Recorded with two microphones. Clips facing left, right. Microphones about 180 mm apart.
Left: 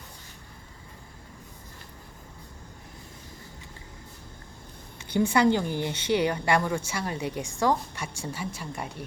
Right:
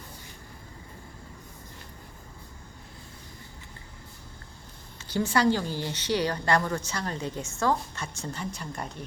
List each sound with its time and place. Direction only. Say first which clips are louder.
5.1 s a woman's voice: left 2 dB; 15° left (ahead or behind)